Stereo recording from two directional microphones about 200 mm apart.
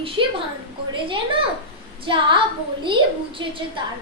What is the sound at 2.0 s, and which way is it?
Speech, 25° right (ahead or behind).